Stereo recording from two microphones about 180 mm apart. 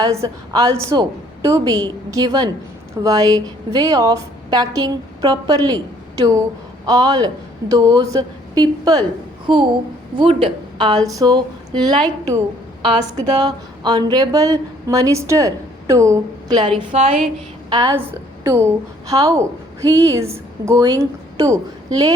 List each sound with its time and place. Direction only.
0.0 s a woman's voice: 20° right (ahead or behind)
13.4 s a woman's voice: 25° right (ahead or behind)
17.7 s a woman's voice: 20° right (ahead or behind)